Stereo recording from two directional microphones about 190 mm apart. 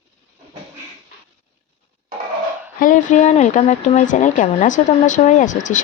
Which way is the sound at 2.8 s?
40° left (ahead or behind).